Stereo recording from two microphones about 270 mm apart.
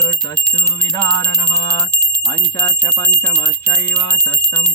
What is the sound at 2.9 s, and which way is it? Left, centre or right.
Clock, centre.